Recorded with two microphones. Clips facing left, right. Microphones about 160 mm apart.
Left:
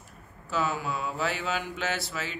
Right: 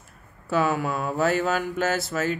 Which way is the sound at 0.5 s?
55° right (ahead or behind).